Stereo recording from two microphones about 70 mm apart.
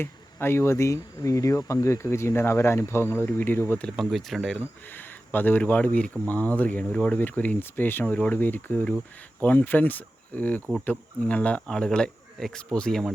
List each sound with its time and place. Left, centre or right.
0.0 s speech: left
3.9 s speech: centre
4.9 s speech: left
8.0 s speech: left